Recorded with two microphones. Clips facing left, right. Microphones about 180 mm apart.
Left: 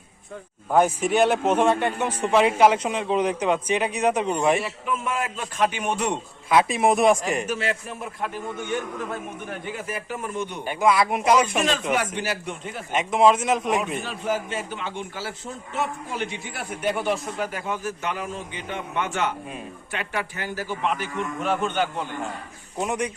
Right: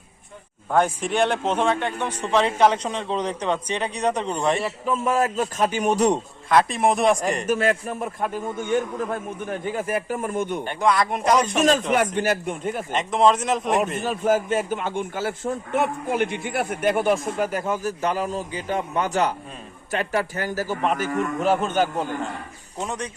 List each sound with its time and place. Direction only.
0.7 s a man's voice: 5° left (ahead or behind)
4.6 s speech: 35° right (ahead or behind)
6.5 s speech: 5° left (ahead or behind)
7.4 s a man's voice: 50° right (ahead or behind)
9.7 s a man's voice: 45° right (ahead or behind)
10.6 s speech: 5° left (ahead or behind)
11.9 s a man's voice: 50° right (ahead or behind)
12.9 s speech: 5° left (ahead or behind)
13.8 s a man's voice: 45° right (ahead or behind)
22.8 s a man's voice: 10° left (ahead or behind)